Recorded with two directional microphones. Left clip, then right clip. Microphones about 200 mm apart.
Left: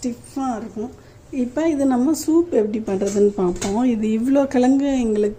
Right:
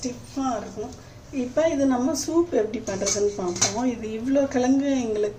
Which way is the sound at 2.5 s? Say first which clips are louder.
Left 4 dB; 35° left (ahead or behind).